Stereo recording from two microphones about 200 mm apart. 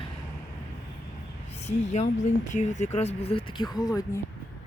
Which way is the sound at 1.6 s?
35° left (ahead or behind).